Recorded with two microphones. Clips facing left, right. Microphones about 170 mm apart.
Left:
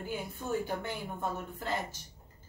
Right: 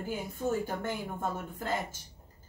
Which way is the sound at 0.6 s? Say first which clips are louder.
Right 2 dB; 45° right (ahead or behind).